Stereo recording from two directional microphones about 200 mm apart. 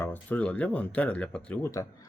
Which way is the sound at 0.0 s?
10° left (ahead or behind).